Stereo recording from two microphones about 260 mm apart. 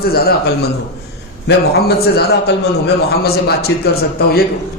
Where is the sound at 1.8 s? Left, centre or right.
Left.